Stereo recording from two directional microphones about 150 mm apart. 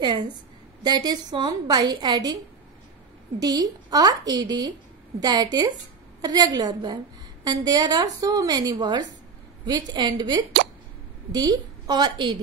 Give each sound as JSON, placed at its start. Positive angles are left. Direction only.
{"t": 0.0, "sound": "a woman's voice", "side_deg": -30}
{"t": 3.3, "sound": "a woman's voice", "side_deg": -25}